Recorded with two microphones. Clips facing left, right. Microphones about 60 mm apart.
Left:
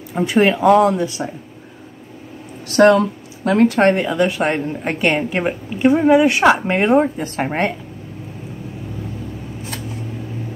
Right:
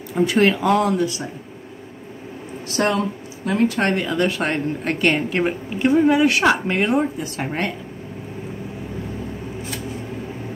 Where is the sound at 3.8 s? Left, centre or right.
Left.